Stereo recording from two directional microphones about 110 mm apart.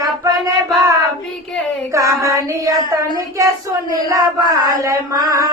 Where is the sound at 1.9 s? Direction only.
30° right (ahead or behind).